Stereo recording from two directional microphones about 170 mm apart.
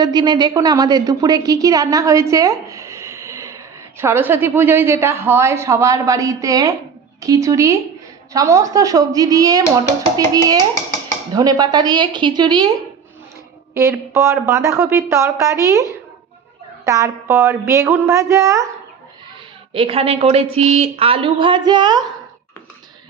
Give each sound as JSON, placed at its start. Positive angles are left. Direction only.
{"t": 0.0, "sound": "a woman's voice", "side_deg": -25}
{"t": 13.7, "sound": "speech", "side_deg": -15}
{"t": 19.7, "sound": "speech", "side_deg": -30}